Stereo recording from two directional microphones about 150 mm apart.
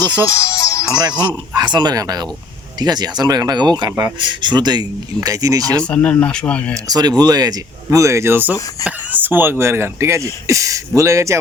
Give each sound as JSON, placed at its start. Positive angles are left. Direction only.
{"t": 0.3, "sound": "music", "side_deg": 20}
{"t": 1.5, "sound": "speech", "side_deg": -30}
{"t": 5.7, "sound": "speech", "side_deg": 10}
{"t": 6.8, "sound": "speech", "side_deg": -25}